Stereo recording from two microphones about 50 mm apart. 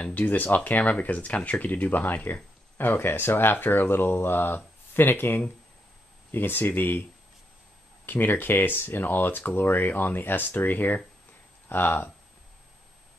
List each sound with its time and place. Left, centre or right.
0.0 s speech: left